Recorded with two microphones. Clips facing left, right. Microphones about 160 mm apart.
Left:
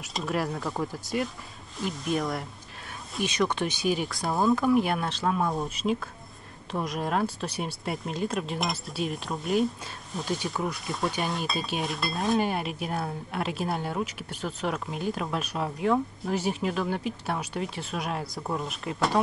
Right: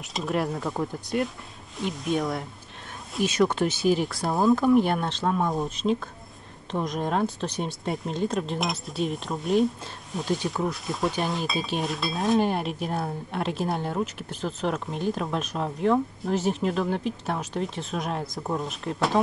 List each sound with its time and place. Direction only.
0.1 s speech: centre (ahead or behind)
3.6 s speech: 15° left (ahead or behind)
3.9 s speech: centre (ahead or behind)